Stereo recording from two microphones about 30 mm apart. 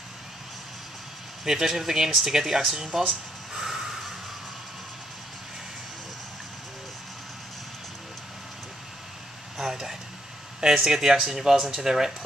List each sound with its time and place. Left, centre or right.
1.4 s speech: centre
3.5 s snort: centre
9.6 s air conditioning: centre
10.6 s speech: centre